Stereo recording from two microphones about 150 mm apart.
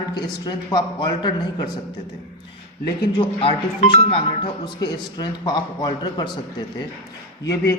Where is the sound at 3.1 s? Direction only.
35° left (ahead or behind).